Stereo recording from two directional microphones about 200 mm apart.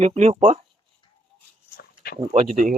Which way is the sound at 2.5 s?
40° right (ahead or behind).